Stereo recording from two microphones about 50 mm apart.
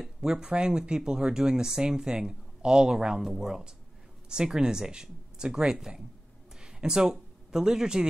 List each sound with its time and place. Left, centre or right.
0.0 s speech: centre